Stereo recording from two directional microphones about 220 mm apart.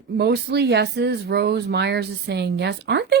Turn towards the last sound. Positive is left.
turn(degrees=-50)  # may be behind; listen again after turning